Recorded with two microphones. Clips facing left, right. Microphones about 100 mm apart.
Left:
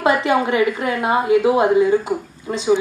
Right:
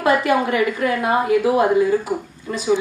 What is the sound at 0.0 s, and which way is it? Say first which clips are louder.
A woman's voice: even; 25° left (ahead or behind).